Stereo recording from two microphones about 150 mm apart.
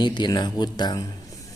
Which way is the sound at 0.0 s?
30° left (ahead or behind).